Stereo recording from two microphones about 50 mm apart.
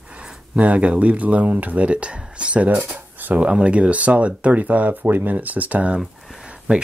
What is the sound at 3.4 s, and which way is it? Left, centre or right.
Speech, right.